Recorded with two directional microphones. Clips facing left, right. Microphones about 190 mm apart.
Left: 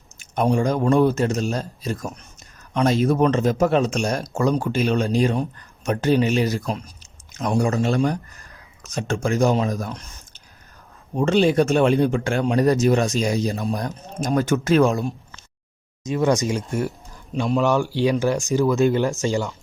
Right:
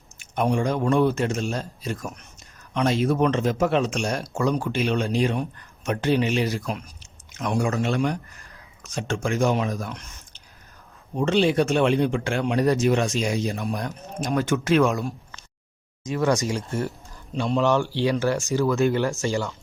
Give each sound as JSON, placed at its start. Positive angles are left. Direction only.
{"t": 0.2, "sound": "speech", "side_deg": 40}
{"t": 16.0, "sound": "speech", "side_deg": 20}